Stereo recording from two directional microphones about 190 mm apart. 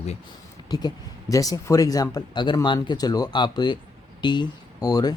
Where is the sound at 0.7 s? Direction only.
20° left (ahead or behind).